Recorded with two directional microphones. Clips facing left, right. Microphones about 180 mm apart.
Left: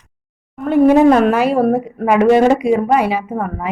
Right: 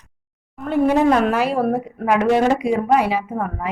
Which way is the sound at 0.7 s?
55° left (ahead or behind).